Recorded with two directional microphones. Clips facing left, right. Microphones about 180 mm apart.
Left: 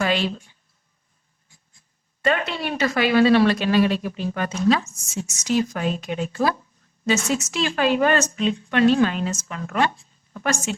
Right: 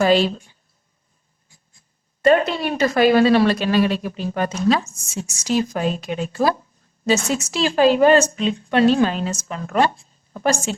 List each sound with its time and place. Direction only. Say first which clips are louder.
0.0 s a woman's voice: right 6 dB; 35° right (ahead or behind)
2.2 s a woman's voice: right 7 dB; 40° right (ahead or behind)